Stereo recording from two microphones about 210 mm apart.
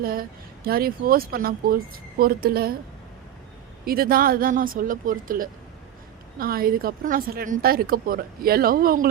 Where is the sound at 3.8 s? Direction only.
45° right (ahead or behind).